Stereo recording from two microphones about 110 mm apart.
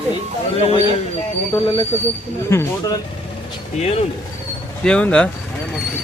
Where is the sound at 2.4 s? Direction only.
25° left (ahead or behind).